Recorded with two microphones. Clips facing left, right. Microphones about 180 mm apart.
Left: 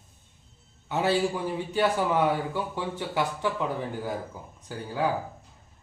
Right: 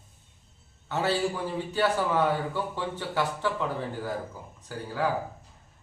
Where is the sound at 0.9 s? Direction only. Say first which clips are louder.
Left 2 dB; 15° left (ahead or behind).